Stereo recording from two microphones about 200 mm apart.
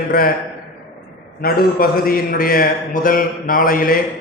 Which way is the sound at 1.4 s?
45° left (ahead or behind).